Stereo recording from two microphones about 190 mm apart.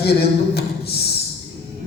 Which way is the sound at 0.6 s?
55° left (ahead or behind).